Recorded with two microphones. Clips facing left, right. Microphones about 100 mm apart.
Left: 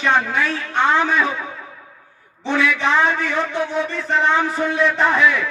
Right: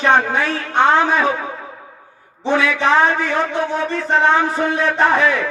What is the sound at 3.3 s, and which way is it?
Speech, 60° right (ahead or behind).